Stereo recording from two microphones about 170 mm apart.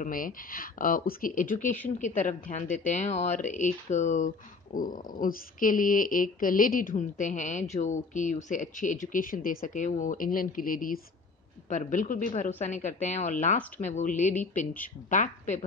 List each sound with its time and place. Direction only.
0.0 s speech: 55° left (ahead or behind)